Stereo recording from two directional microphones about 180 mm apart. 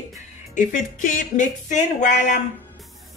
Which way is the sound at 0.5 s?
45° left (ahead or behind).